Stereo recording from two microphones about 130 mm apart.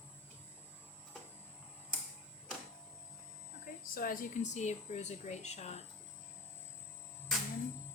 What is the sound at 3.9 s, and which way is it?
Speech, 90° left.